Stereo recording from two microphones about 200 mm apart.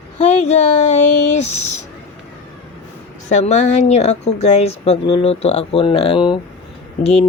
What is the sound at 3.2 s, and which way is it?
Speech, 35° left (ahead or behind).